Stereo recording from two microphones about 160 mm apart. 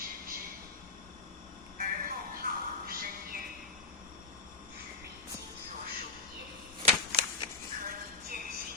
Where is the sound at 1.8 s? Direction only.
65° right (ahead or behind).